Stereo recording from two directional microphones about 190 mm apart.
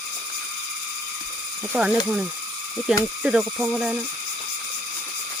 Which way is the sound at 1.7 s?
5° right (ahead or behind).